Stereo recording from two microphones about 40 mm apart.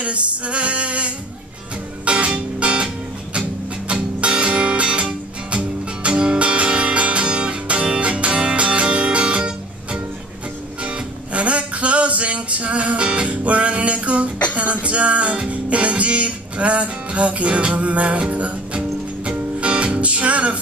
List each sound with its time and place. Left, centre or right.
0.0 s music: right